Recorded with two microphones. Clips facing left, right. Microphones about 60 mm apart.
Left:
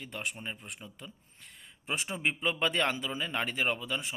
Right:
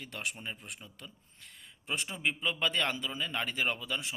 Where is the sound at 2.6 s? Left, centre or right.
Left.